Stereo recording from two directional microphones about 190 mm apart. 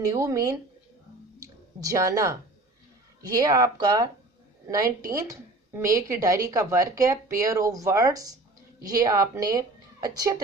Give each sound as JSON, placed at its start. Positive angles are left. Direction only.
{"t": 0.1, "sound": "a woman's voice", "side_deg": -15}
{"t": 1.4, "sound": "a sound", "side_deg": -15}
{"t": 3.2, "sound": "a woman's voice", "side_deg": -20}